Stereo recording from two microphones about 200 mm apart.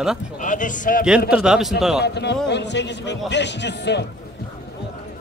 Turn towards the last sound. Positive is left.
turn(degrees=60)  # may be behind; listen again after turning